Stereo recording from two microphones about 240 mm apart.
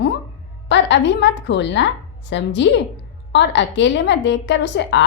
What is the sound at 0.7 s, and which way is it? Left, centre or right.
A woman's voice, left.